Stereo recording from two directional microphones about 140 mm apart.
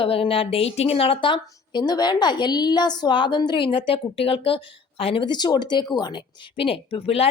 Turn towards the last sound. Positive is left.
turn(degrees=45)  # may be behind; listen again after turning